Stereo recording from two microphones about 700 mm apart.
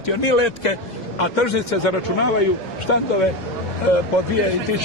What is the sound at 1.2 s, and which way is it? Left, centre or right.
A man's voice, left.